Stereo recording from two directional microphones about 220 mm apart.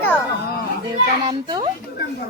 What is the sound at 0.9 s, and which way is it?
Speech, 20° right (ahead or behind).